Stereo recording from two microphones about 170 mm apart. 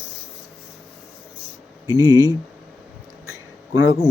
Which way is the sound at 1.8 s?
20° right (ahead or behind).